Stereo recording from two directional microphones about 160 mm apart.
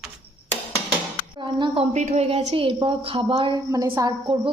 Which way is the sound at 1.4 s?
30° right (ahead or behind).